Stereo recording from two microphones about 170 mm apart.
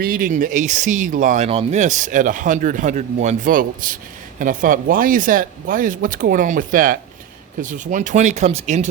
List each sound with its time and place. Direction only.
0.0 s speech: 60° right (ahead or behind)
1.5 s speech: 40° right (ahead or behind)